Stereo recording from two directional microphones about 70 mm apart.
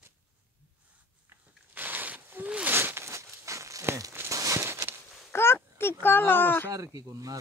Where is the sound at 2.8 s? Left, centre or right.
Right.